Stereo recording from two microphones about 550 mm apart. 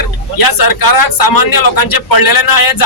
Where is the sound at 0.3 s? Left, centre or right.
Left.